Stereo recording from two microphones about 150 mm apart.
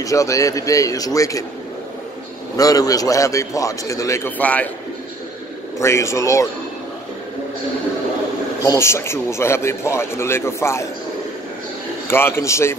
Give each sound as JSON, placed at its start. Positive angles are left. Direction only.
{"t": 0.0, "sound": "a man's voice", "side_deg": 20}
{"t": 2.5, "sound": "a man's voice", "side_deg": 25}
{"t": 5.8, "sound": "a man's voice", "side_deg": 20}
{"t": 8.6, "sound": "a man's voice", "side_deg": 15}
{"t": 12.1, "sound": "a man's voice", "side_deg": 15}